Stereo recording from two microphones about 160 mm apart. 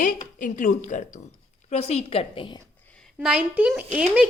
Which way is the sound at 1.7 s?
40° left (ahead or behind).